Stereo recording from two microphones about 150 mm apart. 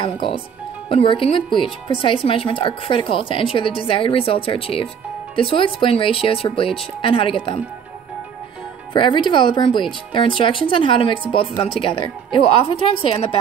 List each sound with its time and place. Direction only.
0.0 s speech: 35° left (ahead or behind)
8.9 s speech: 30° left (ahead or behind)